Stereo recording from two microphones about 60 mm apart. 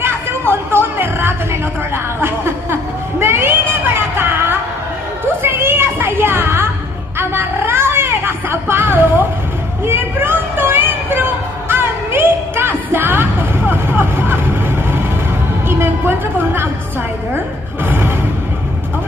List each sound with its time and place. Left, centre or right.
0.0 s music: right
2.2 s a sound: right
17.8 s music: right